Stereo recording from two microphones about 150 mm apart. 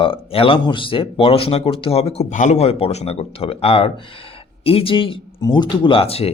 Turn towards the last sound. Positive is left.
turn(degrees=40)  # may be behind; listen again after turning